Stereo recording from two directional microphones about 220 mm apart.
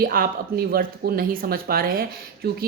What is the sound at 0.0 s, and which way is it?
Speech, 40° right (ahead or behind).